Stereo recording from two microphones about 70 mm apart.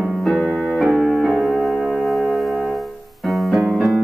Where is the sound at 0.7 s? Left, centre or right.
Centre.